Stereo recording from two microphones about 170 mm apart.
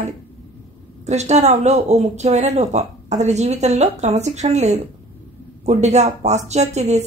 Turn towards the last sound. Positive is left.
turn(degrees=-40)  # may be behind; listen again after turning